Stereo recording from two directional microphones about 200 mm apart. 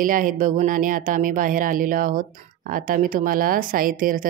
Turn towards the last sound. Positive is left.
turn(degrees=-45)  # may be behind; listen again after turning